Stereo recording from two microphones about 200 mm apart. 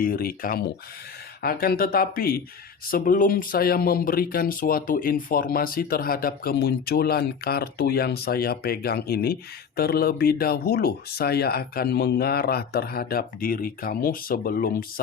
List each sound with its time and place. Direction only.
0.0 s speech: 50° left (ahead or behind)